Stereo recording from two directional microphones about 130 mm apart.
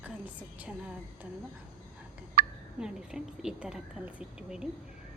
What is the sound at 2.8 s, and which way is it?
A woman's voice, 5° right (ahead or behind).